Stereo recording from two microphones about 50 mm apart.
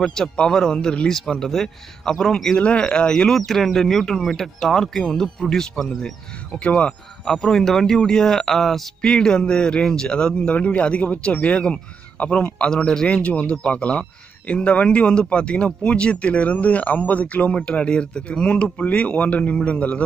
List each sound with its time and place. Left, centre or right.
0.0 s a man's voice: centre
3.3 s a man's voice: centre
6.6 s speech: left
7.2 s a man's voice: centre; by 20.0 s left